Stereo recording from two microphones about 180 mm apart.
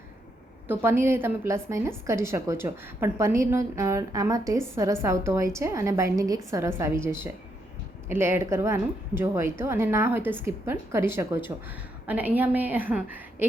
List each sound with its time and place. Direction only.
0.7 s a woman's voice: 10° right (ahead or behind)